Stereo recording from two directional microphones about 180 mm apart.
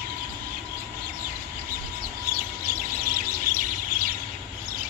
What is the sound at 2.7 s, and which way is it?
Bird, 55° right (ahead or behind).